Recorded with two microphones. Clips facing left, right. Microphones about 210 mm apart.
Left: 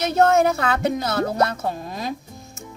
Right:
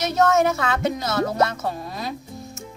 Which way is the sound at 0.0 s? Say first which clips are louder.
Left 2 dB; 30° left (ahead or behind).